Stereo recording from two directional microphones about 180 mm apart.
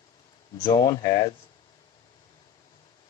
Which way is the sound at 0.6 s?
20° left (ahead or behind).